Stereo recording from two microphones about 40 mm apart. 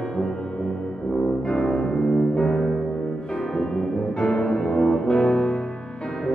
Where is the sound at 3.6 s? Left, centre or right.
Centre.